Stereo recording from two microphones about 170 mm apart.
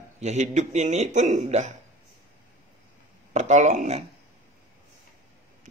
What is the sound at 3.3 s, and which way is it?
Speech, 45° right (ahead or behind).